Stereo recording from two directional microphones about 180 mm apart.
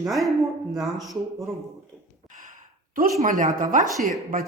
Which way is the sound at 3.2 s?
45° right (ahead or behind).